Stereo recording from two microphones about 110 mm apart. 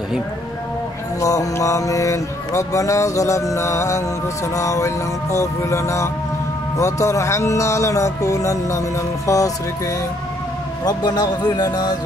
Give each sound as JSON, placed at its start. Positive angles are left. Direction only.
{"t": 1.2, "sound": "speech", "side_deg": 30}